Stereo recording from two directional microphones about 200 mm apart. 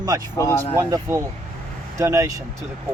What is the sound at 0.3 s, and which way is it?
Speech, 10° left (ahead or behind).